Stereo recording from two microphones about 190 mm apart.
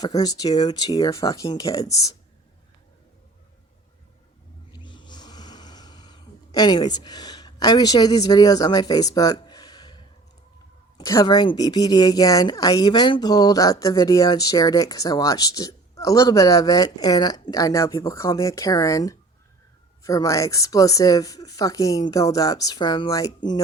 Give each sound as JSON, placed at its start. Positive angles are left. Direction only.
{"t": 0.0, "sound": "a woman's voice", "side_deg": 20}
{"t": 4.7, "sound": "snoring", "side_deg": 25}
{"t": 10.9, "sound": "a woman's voice", "side_deg": 15}